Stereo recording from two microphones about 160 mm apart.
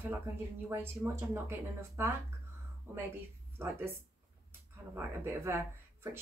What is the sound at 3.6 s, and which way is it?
Speech, 15° right (ahead or behind).